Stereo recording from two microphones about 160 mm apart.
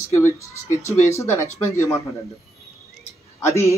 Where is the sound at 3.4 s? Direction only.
20° left (ahead or behind).